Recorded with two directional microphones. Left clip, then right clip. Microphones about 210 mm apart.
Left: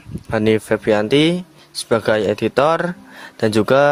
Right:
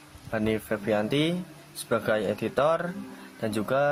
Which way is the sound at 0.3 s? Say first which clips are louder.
Left 12 dB; 45° left (ahead or behind).